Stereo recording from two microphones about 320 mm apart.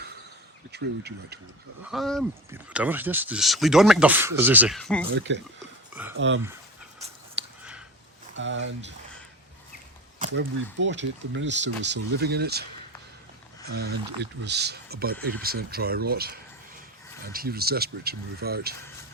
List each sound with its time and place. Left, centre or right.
0.7 s speech: right
1.9 s speech: centre
5.1 s speech: right
5.9 s speech: centre
6.1 s speech: right
7.4 s a sound: right
8.4 s speech: right
10.2 s speech: right
13.7 s speech: right